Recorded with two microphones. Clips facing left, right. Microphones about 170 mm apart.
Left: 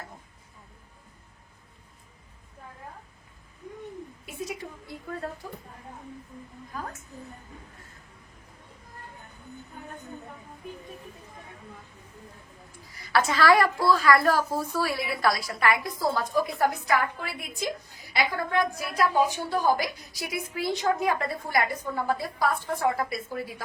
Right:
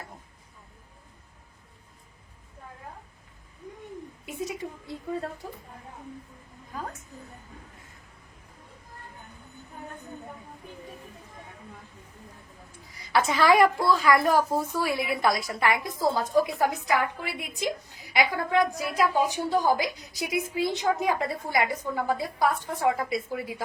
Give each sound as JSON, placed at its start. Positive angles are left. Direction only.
{"t": 12.9, "sound": "a woman's voice", "side_deg": -20}